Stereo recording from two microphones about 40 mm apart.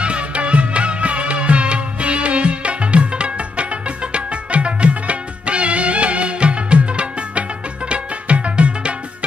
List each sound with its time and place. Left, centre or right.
0.0 s music: right